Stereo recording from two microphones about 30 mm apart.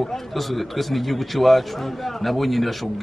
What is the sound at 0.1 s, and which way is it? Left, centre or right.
A man's voice, centre.